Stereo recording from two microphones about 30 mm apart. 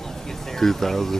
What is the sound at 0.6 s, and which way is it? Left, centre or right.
Speech, centre.